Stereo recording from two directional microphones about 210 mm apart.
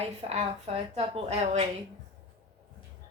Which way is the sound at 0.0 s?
30° right (ahead or behind).